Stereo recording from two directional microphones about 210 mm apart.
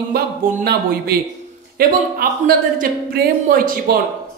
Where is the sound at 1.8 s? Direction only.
45° right (ahead or behind).